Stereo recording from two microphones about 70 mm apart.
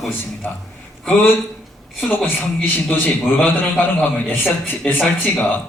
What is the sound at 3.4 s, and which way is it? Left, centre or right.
A man's voice, left.